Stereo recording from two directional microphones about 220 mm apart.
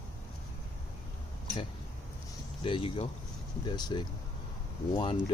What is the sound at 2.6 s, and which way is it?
Speech, 25° left (ahead or behind).